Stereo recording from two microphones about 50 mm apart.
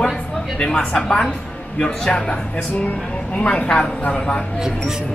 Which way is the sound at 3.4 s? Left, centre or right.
Left.